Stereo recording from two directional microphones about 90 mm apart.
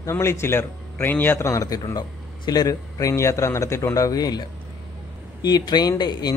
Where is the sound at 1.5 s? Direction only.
35° left (ahead or behind).